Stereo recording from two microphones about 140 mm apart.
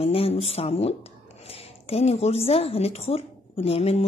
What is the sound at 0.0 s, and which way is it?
A woman's voice, 45° left (ahead or behind).